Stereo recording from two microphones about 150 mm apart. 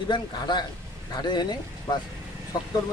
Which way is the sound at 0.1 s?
30° left (ahead or behind).